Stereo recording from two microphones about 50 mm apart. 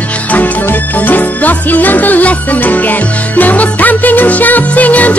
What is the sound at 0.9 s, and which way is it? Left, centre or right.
Music, left.